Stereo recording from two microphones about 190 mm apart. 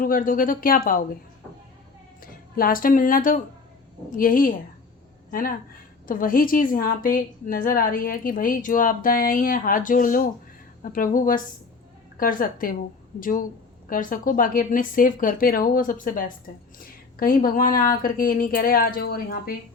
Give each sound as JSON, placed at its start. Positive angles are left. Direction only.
{"t": 0.0, "sound": "a woman's voice", "side_deg": 45}
{"t": 2.2, "sound": "a woman's voice", "side_deg": 50}